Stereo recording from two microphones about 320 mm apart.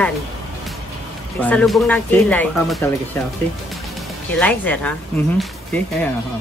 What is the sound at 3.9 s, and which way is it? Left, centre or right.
Speech, centre.